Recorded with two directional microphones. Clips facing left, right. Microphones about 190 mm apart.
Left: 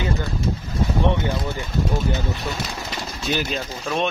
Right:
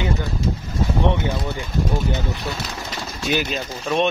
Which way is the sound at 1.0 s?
15° right (ahead or behind).